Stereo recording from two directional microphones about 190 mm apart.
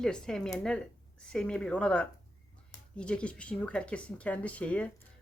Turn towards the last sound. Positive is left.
turn(degrees=5)  # may be behind; listen again after turning